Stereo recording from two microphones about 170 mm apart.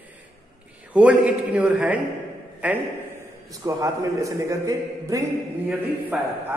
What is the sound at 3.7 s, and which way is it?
A man's voice, 20° right (ahead or behind).